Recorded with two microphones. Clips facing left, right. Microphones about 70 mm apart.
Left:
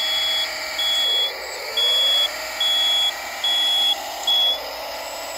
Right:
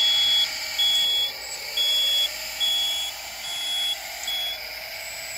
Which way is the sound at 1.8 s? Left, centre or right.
Left.